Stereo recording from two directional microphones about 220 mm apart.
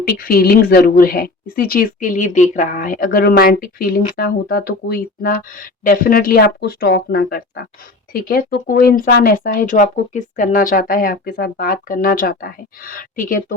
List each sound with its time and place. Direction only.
0.0 s speech: 40° left (ahead or behind)